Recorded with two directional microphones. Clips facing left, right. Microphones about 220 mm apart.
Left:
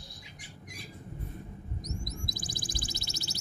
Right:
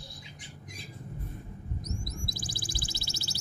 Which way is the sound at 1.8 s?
20° left (ahead or behind).